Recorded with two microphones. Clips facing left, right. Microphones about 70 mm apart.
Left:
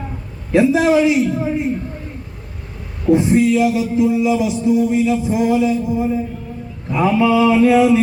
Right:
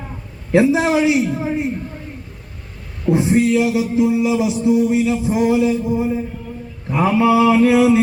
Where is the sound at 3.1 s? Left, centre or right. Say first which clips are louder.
Left 2 dB; centre.